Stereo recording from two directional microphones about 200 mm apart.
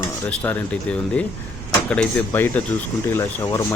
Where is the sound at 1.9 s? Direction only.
10° left (ahead or behind).